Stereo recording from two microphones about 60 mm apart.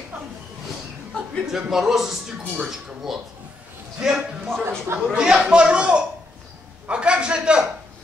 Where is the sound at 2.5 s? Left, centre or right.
Centre.